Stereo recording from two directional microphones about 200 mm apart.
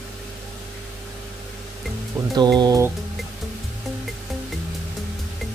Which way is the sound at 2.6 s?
20° right (ahead or behind).